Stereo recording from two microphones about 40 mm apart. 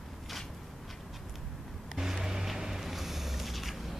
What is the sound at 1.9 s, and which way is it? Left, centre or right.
Vehicle, centre.